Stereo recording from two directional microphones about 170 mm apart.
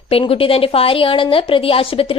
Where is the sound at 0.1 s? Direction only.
35° left (ahead or behind).